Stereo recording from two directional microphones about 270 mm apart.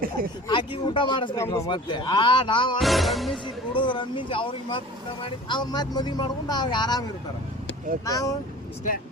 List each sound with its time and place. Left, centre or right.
0.4 s speech: centre
2.8 s music: centre
3.3 s speech: centre
8.0 s speech: centre